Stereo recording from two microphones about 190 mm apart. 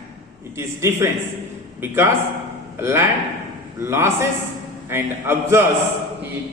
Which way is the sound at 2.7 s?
15° right (ahead or behind).